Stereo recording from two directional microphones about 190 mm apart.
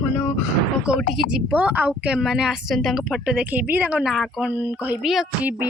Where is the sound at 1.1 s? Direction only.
5° right (ahead or behind).